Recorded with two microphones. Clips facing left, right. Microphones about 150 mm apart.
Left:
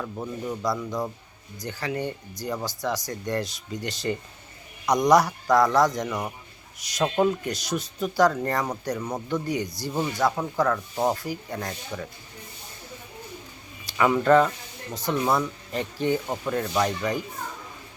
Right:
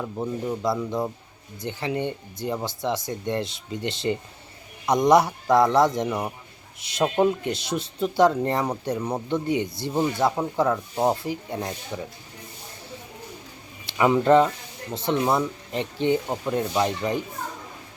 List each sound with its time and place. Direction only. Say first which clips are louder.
0.0 s speech: right 3 dB; 20° right (ahead or behind)
13.8 s speech: right 2 dB; 20° right (ahead or behind)